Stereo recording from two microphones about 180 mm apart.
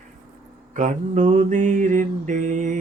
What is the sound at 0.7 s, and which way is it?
Mantra, 45° right (ahead or behind).